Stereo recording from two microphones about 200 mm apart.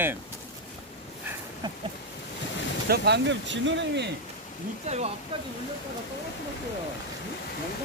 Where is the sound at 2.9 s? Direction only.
55° right (ahead or behind).